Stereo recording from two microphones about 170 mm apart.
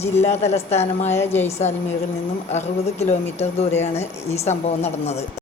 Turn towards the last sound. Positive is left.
turn(degrees=40)  # may be behind; listen again after turning